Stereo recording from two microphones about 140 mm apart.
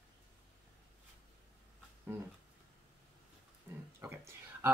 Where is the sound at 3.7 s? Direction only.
20° right (ahead or behind).